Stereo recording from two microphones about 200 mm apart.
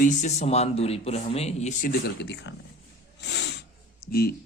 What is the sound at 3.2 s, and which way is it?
Snort, 60° left (ahead or behind).